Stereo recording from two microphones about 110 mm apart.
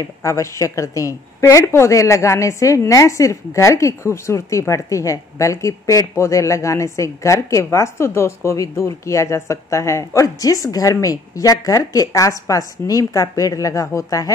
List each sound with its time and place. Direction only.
0.0 s a woman's voice: 30° left (ahead or behind)